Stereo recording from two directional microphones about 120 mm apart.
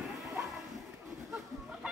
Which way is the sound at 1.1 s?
5° right (ahead or behind).